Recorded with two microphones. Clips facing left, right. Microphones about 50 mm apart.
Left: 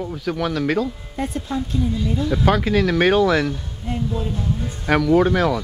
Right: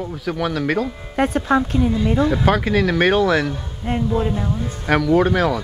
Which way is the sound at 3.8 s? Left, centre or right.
Right.